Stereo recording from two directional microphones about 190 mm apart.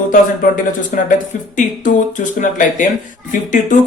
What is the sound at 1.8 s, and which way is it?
Speech, 40° left (ahead or behind).